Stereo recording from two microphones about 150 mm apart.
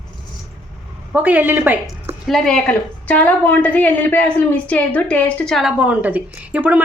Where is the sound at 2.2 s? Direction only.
Centre (ahead or behind).